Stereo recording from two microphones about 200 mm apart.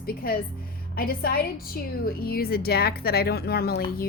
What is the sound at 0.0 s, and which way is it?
A woman's voice, 50° left (ahead or behind).